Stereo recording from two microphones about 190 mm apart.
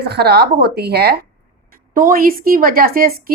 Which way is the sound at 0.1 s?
55° right (ahead or behind).